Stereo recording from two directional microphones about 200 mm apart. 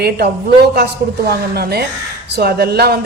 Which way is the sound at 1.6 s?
50° right (ahead or behind).